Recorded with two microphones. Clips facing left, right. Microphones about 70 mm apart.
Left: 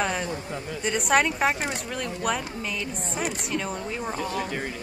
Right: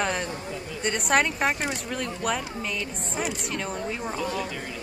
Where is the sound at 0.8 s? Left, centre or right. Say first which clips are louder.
Left 1 dB; centre.